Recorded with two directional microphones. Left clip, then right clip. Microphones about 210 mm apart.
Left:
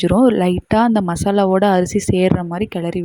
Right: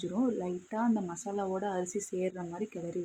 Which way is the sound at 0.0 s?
45° left (ahead or behind).